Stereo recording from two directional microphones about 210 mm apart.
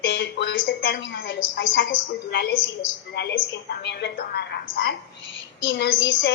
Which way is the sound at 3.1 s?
50° left (ahead or behind).